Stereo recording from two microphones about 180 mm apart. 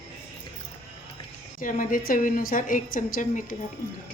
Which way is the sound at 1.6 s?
50° left (ahead or behind).